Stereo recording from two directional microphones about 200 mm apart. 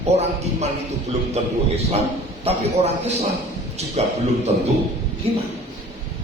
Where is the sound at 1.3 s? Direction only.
30° right (ahead or behind).